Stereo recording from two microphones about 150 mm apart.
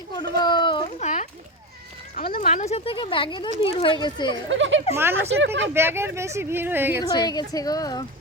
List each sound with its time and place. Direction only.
0.1 s a sound: 30° left (ahead or behind)
0.9 s speech: 50° left (ahead or behind)
2.1 s speech: 75° left (ahead or behind)
2.4 s speech: 50° left (ahead or behind); by 4.4 s 30° left (ahead or behind)
4.9 s speech: 15° right (ahead or behind)
7.0 s a woman's voice: 25° left (ahead or behind)